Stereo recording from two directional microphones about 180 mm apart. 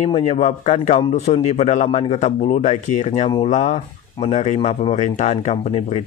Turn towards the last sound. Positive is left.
turn(degrees=35)  # may be behind; listen again after turning